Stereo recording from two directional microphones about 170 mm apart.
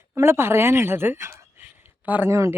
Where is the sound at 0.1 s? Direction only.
15° right (ahead or behind).